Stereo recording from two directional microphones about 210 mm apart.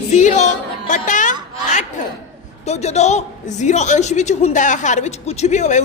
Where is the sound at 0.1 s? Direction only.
35° left (ahead or behind).